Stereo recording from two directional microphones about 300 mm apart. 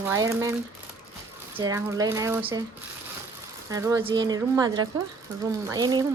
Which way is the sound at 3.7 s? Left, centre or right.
Centre.